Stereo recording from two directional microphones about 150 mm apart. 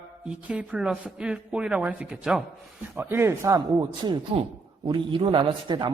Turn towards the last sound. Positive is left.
turn(degrees=-30)  # may be behind; listen again after turning